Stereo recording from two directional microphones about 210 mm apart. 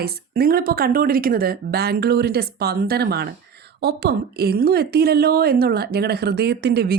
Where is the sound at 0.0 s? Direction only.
45° right (ahead or behind).